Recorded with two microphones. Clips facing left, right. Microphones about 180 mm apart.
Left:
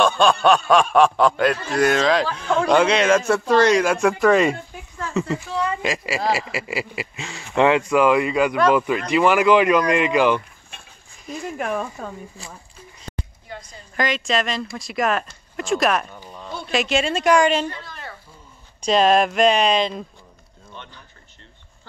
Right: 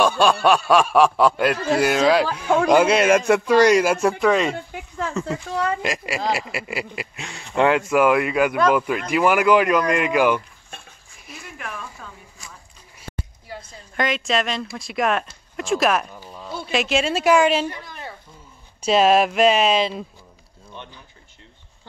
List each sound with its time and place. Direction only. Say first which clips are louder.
0.0 s speech: even; 5° right (ahead or behind)
11.5 s speech: left 9 dB; 45° left (ahead or behind)
13.7 s speech: even; centre (ahead or behind)
18.8 s speech: even; 5° right (ahead or behind)
20.7 s speech: right 2 dB; 15° right (ahead or behind)